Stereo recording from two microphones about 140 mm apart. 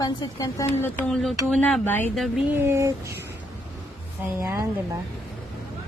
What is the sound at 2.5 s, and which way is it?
Speech, 20° right (ahead or behind).